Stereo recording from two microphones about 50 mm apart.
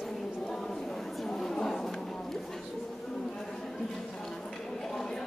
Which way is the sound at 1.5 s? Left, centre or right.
Centre.